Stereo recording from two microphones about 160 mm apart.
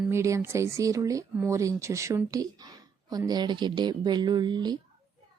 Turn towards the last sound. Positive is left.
turn(degrees=-25)  # may be behind; listen again after turning